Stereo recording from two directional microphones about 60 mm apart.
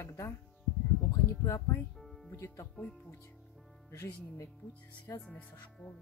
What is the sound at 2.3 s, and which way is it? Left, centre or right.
Speech, left.